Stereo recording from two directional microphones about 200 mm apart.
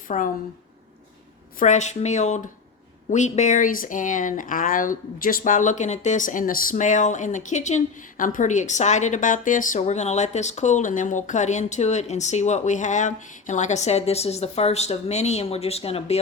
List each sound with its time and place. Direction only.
0.1 s speech: 35° left (ahead or behind)
1.5 s speech: 35° left (ahead or behind)